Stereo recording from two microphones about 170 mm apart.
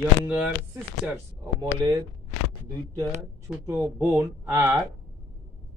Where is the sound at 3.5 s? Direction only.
15° right (ahead or behind).